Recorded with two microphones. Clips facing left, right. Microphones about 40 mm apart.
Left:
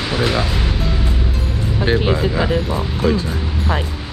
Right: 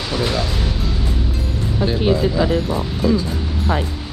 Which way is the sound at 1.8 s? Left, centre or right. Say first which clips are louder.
Even; left.